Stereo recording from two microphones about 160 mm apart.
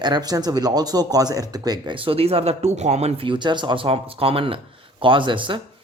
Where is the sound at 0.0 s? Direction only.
25° right (ahead or behind).